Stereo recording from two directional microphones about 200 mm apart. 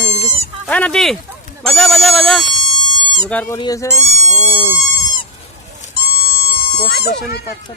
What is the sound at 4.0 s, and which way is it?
Goat, 35° right (ahead or behind).